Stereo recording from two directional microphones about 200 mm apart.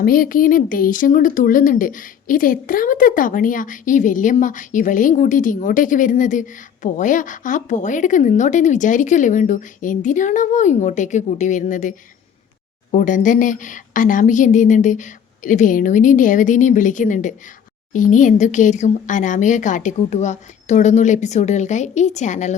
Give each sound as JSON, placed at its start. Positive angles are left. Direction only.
{"t": 0.0, "sound": "speech", "side_deg": 45}